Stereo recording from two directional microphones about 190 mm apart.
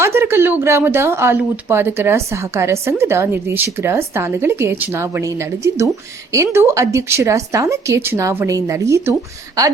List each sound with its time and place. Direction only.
0.0 s a woman's voice: 10° right (ahead or behind)